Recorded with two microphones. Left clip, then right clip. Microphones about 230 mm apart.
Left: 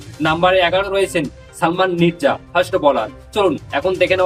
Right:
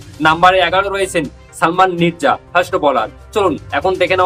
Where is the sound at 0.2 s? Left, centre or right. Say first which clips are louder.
Right 4 dB; centre.